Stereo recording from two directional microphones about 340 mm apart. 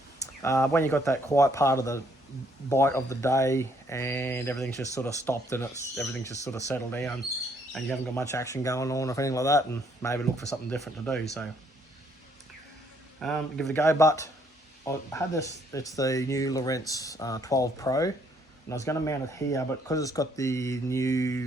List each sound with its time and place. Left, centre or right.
0.4 s speech: centre
13.1 s speech: centre